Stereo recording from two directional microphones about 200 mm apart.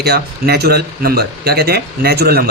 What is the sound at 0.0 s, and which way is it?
Speech, 55° right (ahead or behind).